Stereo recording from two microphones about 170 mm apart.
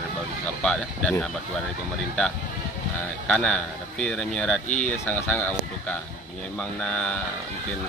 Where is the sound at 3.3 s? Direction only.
5° left (ahead or behind).